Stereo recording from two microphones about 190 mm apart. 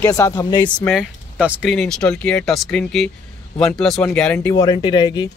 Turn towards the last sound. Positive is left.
turn(degrees=25)  # may be behind; listen again after turning